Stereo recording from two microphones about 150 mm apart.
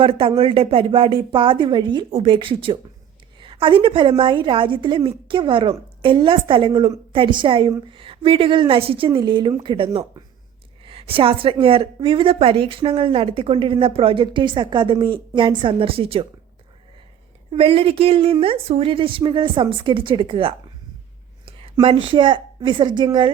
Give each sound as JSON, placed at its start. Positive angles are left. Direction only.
{"t": 0.0, "sound": "a woman's voice", "side_deg": -40}
{"t": 17.5, "sound": "a woman's voice", "side_deg": -40}